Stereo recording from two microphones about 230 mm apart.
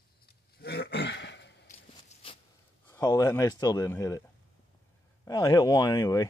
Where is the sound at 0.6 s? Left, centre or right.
Left.